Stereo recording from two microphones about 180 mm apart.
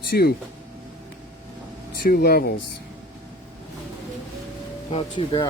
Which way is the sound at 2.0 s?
60° left (ahead or behind).